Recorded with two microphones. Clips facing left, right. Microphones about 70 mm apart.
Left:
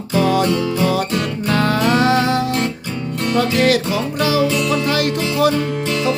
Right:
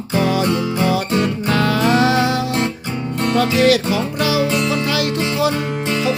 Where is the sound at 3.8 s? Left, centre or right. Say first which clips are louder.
Even; right.